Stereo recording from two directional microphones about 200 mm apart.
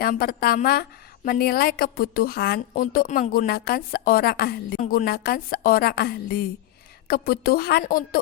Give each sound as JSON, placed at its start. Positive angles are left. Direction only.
{"t": 0.0, "sound": "a woman's voice", "side_deg": 45}